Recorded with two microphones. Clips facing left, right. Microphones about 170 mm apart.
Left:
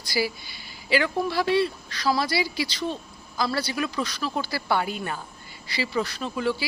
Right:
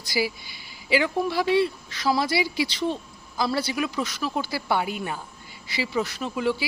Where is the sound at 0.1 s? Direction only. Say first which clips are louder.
Even; 15° right (ahead or behind).